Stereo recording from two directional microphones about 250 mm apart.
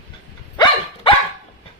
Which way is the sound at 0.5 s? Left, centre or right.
Centre.